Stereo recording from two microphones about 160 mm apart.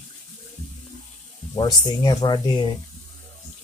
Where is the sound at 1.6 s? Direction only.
25° left (ahead or behind).